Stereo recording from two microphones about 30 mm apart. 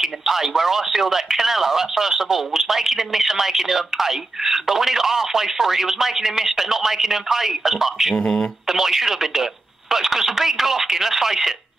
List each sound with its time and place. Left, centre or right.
0.0 s speech: centre
8.2 s speech: centre
8.6 s speech: centre